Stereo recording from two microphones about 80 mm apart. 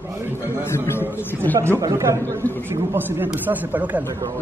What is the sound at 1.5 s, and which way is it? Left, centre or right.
Speech, right.